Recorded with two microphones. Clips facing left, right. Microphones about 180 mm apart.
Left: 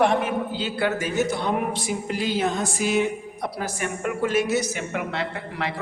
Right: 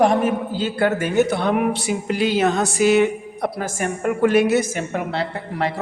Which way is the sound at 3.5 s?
45° right (ahead or behind).